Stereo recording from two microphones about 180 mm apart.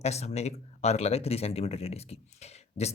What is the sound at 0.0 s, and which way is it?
Speech, 35° left (ahead or behind).